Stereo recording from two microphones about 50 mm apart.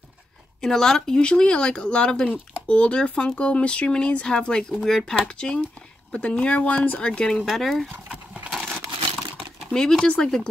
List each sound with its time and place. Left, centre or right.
0.6 s speech: centre
7.3 s speech: centre
8.5 s crumpling: centre
9.7 s speech: centre